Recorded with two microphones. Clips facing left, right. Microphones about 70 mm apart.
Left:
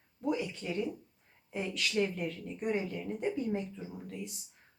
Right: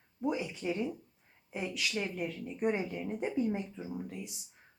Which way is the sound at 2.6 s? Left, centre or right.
Centre.